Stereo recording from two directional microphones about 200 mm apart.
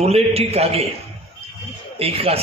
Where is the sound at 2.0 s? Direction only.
30° right (ahead or behind).